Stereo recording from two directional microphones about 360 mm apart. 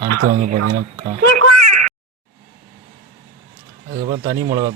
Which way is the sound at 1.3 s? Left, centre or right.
Right.